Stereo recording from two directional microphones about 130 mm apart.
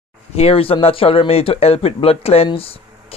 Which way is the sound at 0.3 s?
50° left (ahead or behind).